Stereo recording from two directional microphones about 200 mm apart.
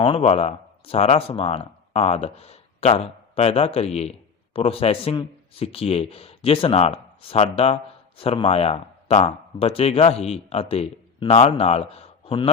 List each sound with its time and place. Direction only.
0.0 s speech: 30° left (ahead or behind)